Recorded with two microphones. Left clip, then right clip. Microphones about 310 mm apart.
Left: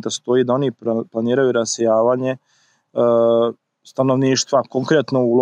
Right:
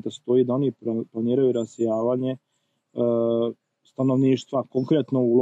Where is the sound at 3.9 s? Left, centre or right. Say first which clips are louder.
Left 5 dB; left.